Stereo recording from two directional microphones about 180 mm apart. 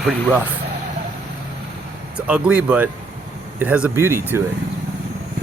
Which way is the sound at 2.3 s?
5° right (ahead or behind).